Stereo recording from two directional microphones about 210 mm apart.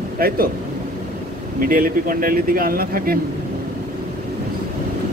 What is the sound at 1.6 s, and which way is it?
Speech, 40° right (ahead or behind).